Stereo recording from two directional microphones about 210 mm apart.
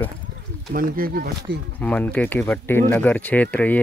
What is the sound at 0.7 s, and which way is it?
Speech, 45° right (ahead or behind).